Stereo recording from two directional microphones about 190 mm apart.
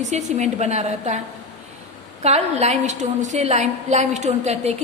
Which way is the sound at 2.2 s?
35° right (ahead or behind).